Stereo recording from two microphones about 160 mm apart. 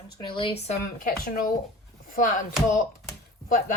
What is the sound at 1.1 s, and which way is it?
Speech, 65° left (ahead or behind).